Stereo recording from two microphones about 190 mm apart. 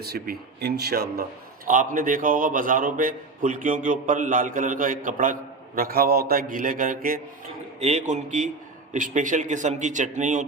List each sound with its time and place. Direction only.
0.0 s speech: 55° right (ahead or behind)
1.6 s a man's voice: 45° right (ahead or behind)
7.8 s speech: 35° right (ahead or behind)